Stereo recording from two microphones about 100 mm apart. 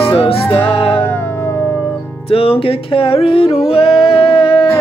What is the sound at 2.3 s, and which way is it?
Music, 70° left (ahead or behind).